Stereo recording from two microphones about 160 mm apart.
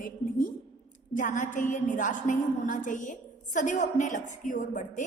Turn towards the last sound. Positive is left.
turn(degrees=50)  # may be behind; listen again after turning